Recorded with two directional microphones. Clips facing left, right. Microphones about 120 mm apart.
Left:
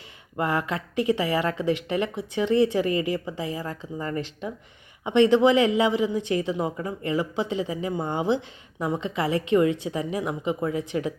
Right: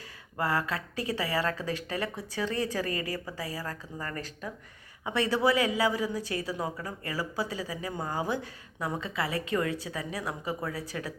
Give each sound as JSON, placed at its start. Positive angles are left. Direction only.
{"t": 0.3, "sound": "speech", "side_deg": 20}